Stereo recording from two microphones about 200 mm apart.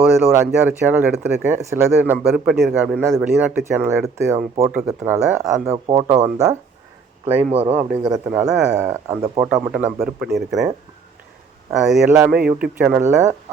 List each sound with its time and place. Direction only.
0.1 s a man's voice: 15° right (ahead or behind)
6.1 s speech: 35° right (ahead or behind)
7.6 s speech: 30° right (ahead or behind)
8.0 s a man's voice: 15° right (ahead or behind)
9.2 s speech: 25° right (ahead or behind)
9.6 s speech: 10° right (ahead or behind)
11.7 s a man's voice: centre (ahead or behind)